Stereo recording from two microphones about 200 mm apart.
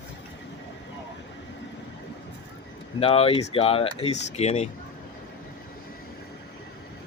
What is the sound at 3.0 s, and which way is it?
Speech, 30° left (ahead or behind).